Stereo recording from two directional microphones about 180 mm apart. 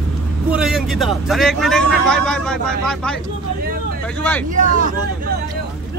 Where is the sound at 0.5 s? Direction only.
5° right (ahead or behind).